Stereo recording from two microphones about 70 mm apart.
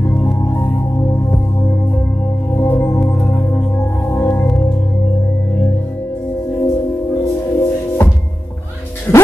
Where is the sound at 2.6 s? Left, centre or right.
Left.